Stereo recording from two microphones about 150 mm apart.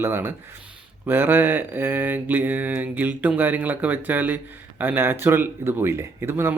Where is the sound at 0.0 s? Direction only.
15° right (ahead or behind).